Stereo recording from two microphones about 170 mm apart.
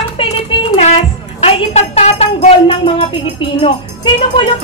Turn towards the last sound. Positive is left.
turn(degrees=25)  # may be behind; listen again after turning